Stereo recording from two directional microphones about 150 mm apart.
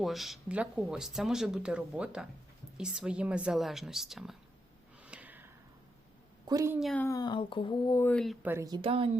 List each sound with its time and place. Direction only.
0.0 s speech: centre (ahead or behind)
5.0 s a sound: 10° right (ahead or behind)
6.5 s a woman's voice: 20° right (ahead or behind)
6.7 s speech: centre (ahead or behind)
7.0 s speech: 25° left (ahead or behind)
7.9 s speech: 15° left (ahead or behind)
8.4 s speech: 15° right (ahead or behind)
8.6 s a woman's voice: 25° right (ahead or behind)